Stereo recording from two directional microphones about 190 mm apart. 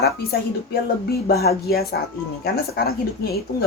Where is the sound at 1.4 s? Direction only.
55° left (ahead or behind).